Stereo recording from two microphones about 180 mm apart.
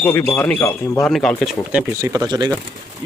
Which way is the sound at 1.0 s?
5° left (ahead or behind).